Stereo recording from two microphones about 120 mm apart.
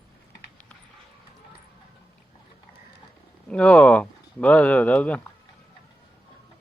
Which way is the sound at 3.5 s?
10° left (ahead or behind).